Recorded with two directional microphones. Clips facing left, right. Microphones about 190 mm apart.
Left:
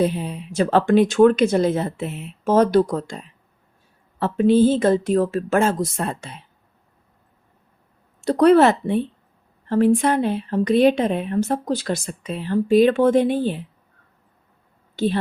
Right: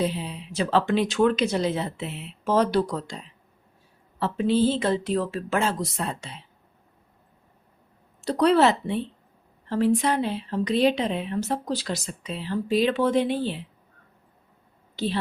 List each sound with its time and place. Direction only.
0.0 s a woman's voice: 50° left (ahead or behind)
8.2 s a woman's voice: 55° left (ahead or behind)
14.9 s a woman's voice: 50° left (ahead or behind)